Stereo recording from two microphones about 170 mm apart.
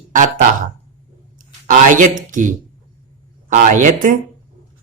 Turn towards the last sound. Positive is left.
turn(degrees=-50)  # may be behind; listen again after turning